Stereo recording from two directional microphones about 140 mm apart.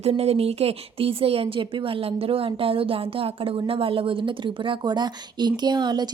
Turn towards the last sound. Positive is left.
turn(degrees=-30)  # may be behind; listen again after turning